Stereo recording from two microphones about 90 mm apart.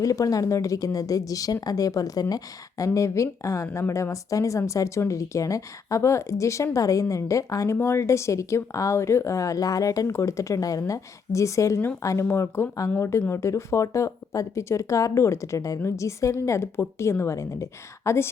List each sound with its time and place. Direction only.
0.0 s speech: 40° left (ahead or behind)